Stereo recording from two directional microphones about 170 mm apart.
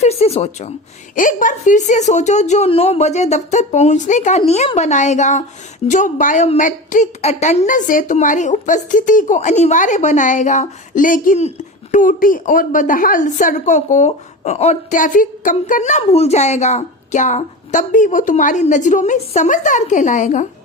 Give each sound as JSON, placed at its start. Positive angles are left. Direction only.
{"t": 0.0, "sound": "speech", "side_deg": 35}
{"t": 1.1, "sound": "a woman's voice", "side_deg": 50}